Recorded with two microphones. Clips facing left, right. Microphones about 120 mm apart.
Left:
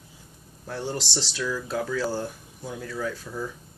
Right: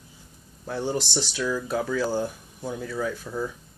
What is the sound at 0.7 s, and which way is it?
Speech, 5° right (ahead or behind).